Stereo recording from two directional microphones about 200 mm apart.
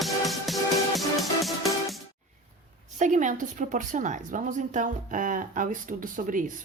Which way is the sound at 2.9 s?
40° right (ahead or behind).